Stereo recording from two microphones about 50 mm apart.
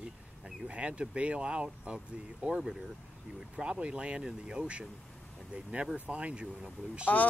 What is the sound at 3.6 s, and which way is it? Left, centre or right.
Speech, right.